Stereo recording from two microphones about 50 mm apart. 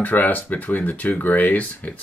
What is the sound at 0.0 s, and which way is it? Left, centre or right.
Speech, left.